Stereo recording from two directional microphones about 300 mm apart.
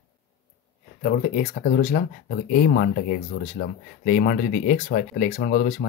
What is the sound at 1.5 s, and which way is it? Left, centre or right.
Speech, left.